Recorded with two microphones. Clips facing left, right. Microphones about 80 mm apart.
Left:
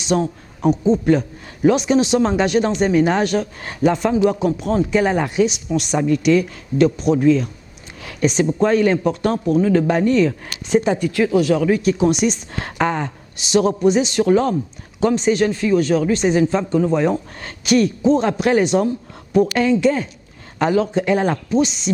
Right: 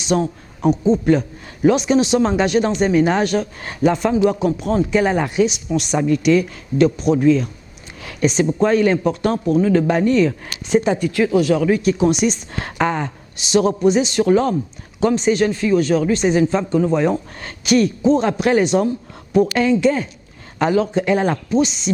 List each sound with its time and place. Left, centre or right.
0.0 s a man's voice: centre